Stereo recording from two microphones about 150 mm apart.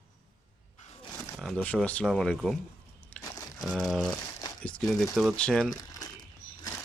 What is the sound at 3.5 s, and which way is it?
Speech, 5° left (ahead or behind).